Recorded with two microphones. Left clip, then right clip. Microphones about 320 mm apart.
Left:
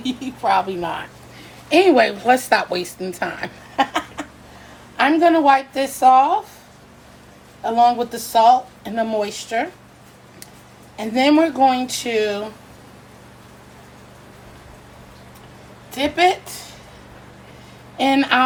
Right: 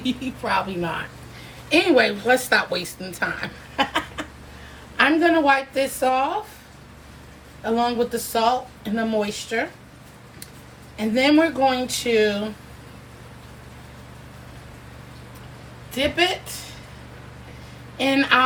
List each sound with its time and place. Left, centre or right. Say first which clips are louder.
0.0 s a woman's voice: left 5 dB; centre
3.2 s chuckle: right 2 dB; left
4.9 s speech: left 3 dB; centre
7.6 s speech: left 6 dB; centre
10.9 s speech: left 2 dB; centre
17.9 s speech: left 2 dB; left